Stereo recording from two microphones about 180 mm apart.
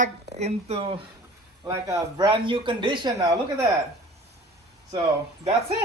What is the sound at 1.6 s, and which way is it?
Speech, 20° right (ahead or behind).